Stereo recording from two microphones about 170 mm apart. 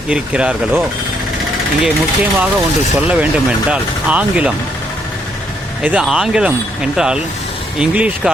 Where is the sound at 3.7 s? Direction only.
5° right (ahead or behind).